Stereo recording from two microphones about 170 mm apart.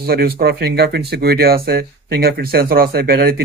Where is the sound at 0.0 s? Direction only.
65° right (ahead or behind).